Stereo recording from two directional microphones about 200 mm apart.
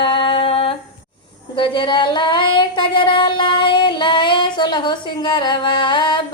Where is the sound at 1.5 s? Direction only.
25° left (ahead or behind).